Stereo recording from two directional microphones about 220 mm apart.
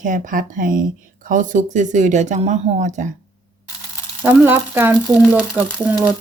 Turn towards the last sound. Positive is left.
turn(degrees=-5)  # may be behind; listen again after turning